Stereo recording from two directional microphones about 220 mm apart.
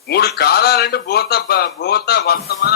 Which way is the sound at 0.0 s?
45° left (ahead or behind).